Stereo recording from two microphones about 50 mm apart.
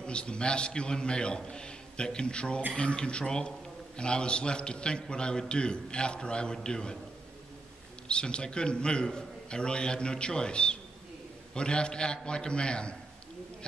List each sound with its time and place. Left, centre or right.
0.0 s a man's voice: centre
8.1 s a man's voice: centre